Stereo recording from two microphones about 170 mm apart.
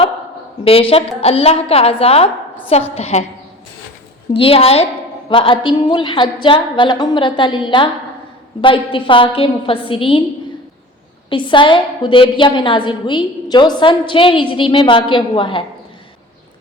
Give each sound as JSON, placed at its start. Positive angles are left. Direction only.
{"t": 0.6, "sound": "a woman's voice", "side_deg": 35}
{"t": 4.4, "sound": "a woman's voice", "side_deg": 35}
{"t": 11.3, "sound": "a woman's voice", "side_deg": 30}